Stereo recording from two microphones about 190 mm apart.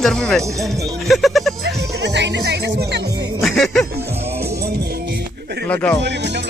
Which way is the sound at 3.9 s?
60° right (ahead or behind).